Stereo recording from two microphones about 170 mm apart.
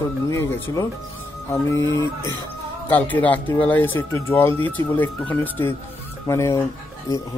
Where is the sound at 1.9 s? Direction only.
20° left (ahead or behind).